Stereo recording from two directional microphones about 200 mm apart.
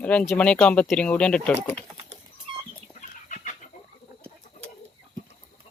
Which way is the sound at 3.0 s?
40° left (ahead or behind).